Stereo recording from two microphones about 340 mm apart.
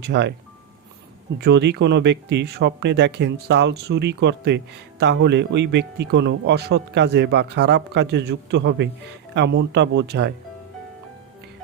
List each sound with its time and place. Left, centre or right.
0.0 s speech: right
1.4 s speech: right